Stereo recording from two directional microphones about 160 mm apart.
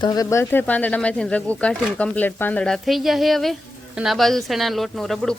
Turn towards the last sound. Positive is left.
turn(degrees=0)  # may be behind; listen again after turning